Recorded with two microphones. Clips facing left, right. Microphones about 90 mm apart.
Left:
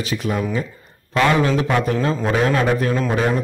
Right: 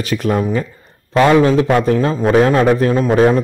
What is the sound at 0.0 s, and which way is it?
Speech, 50° right (ahead or behind).